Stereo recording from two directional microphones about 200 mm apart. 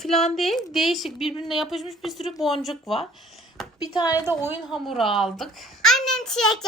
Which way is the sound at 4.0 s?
20° left (ahead or behind).